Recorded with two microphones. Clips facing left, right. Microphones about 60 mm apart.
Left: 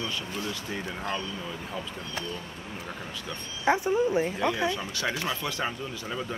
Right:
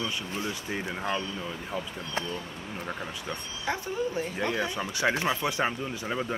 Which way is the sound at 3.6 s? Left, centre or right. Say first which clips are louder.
Left 7 dB; left.